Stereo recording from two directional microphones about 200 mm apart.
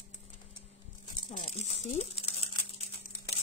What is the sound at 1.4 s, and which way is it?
Speech, 30° left (ahead or behind).